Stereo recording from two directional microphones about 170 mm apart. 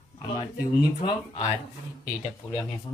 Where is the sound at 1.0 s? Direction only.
25° left (ahead or behind).